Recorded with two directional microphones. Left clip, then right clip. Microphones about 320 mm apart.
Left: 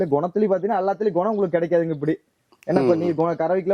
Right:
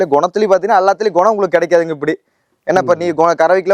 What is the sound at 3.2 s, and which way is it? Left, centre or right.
Speech, centre.